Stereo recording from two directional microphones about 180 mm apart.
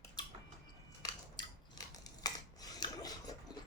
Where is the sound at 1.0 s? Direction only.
20° left (ahead or behind).